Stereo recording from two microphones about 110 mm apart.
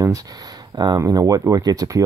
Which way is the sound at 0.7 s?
40° right (ahead or behind).